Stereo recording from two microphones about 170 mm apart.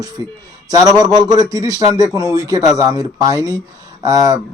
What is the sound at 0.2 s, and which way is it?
A man's voice, 20° right (ahead or behind).